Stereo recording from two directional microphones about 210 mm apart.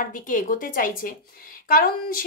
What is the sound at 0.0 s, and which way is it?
Speech, 40° left (ahead or behind).